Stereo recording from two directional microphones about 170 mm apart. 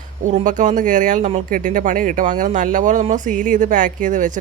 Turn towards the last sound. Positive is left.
turn(degrees=-50)  # may be behind; listen again after turning